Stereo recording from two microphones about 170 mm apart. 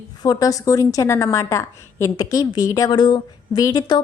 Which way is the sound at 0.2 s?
20° left (ahead or behind).